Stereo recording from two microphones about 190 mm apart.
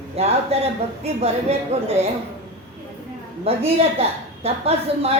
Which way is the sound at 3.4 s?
30° right (ahead or behind).